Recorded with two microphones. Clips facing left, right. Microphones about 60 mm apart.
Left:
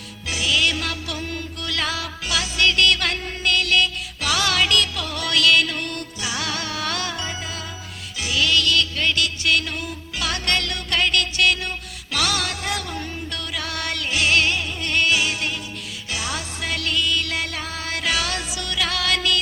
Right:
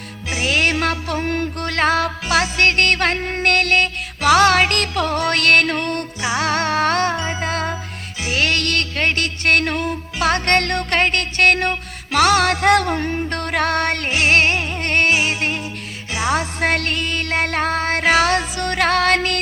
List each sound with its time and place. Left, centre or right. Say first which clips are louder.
0.3 s music: right 3 dB; right
0.5 s music: right 5 dB; right
7.4 s music: right 10 dB; right